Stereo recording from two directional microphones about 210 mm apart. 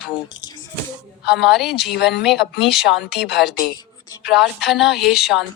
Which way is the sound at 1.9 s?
55° left (ahead or behind).